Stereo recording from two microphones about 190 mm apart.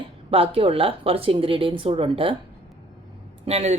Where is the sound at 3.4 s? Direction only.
35° right (ahead or behind).